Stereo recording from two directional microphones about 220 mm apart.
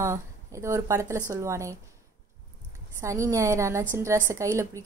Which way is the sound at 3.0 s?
15° right (ahead or behind).